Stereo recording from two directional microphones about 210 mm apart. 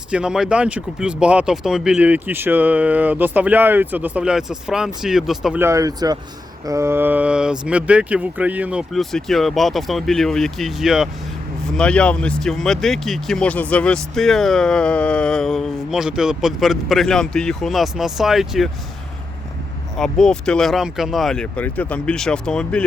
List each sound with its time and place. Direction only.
0.1 s speech: 5° right (ahead or behind)
20.0 s speech: 5° left (ahead or behind)